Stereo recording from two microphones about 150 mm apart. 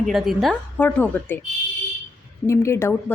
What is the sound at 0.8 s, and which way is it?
Speech, 10° left (ahead or behind).